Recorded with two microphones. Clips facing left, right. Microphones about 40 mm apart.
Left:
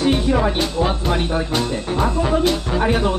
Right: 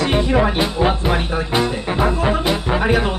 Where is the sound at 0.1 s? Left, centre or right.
Right.